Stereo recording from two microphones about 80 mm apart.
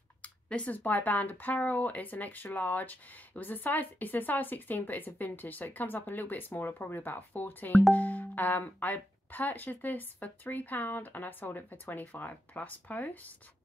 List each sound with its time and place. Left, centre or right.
0.2 s speech: centre